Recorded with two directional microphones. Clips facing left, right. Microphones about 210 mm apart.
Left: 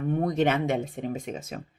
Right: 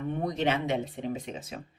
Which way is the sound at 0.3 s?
50° left (ahead or behind).